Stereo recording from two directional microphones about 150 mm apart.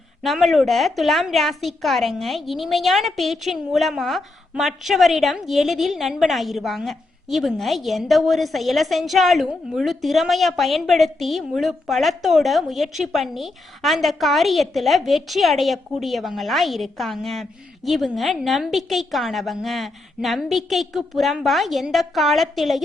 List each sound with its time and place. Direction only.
0.2 s a woman's voice: centre (ahead or behind)